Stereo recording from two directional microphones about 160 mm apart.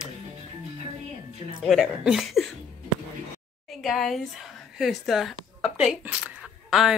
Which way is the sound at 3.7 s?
Centre (ahead or behind).